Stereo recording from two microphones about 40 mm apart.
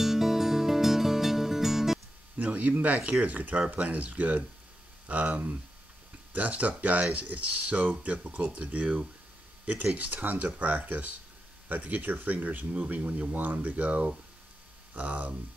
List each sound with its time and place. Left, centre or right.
0.0 s music: centre
2.3 s a sound: right
3.0 s speech: right
3.3 s speech: right